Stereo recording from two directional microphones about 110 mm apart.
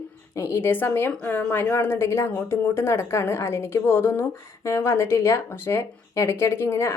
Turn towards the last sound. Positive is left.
turn(degrees=25)  # may be behind; listen again after turning